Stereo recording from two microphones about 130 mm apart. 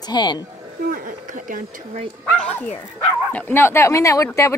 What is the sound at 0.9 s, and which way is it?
Speech, 90° right.